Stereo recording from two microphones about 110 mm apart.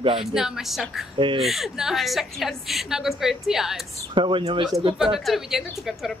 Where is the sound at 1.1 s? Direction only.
50° right (ahead or behind).